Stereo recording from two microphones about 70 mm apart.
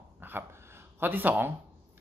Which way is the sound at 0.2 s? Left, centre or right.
Right.